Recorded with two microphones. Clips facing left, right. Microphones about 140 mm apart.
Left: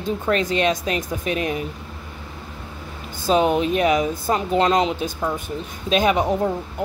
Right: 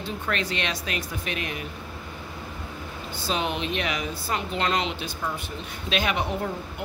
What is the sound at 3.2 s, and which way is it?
A woman's voice, 45° left (ahead or behind).